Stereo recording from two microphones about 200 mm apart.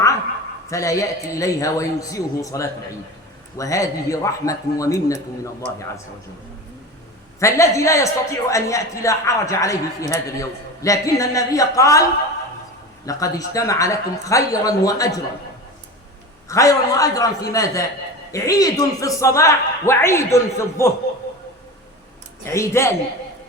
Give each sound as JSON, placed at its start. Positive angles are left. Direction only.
{"t": 0.7, "sound": "a man's voice", "side_deg": 15}
{"t": 7.3, "sound": "a man's voice", "side_deg": 15}
{"t": 13.1, "sound": "a man's voice", "side_deg": 15}
{"t": 16.5, "sound": "a man's voice", "side_deg": 15}
{"t": 22.4, "sound": "a man's voice", "side_deg": 15}